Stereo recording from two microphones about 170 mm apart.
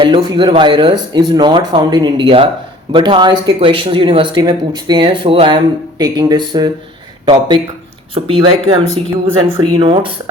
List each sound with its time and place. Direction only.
0.0 s speech: 30° right (ahead or behind)